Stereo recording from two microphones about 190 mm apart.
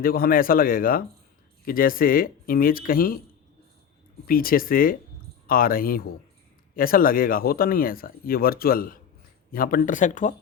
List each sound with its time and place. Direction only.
0.0 s speech: 50° left (ahead or behind)
4.3 s speech: 50° left (ahead or behind)